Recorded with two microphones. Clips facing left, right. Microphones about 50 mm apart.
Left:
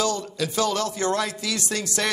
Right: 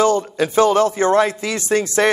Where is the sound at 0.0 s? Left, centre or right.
Right.